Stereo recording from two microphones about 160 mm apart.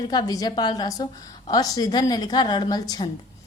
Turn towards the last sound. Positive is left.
turn(degrees=25)  # may be behind; listen again after turning